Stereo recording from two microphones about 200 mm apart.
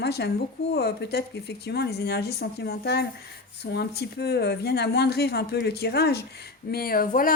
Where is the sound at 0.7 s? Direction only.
55° left (ahead or behind).